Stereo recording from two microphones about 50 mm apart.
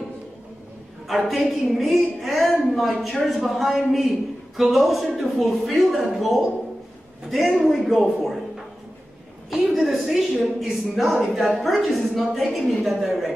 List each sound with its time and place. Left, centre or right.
1.0 s a woman's voice: centre
9.5 s a woman's voice: centre